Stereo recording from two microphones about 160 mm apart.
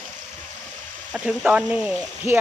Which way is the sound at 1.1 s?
5° right (ahead or behind).